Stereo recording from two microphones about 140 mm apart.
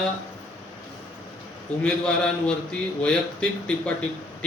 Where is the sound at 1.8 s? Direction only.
5° left (ahead or behind).